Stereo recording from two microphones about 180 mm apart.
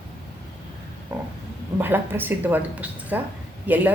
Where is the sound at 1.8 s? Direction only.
10° right (ahead or behind).